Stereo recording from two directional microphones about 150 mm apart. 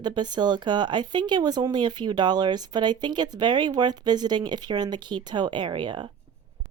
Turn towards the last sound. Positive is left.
turn(degrees=-30)  # may be behind; listen again after turning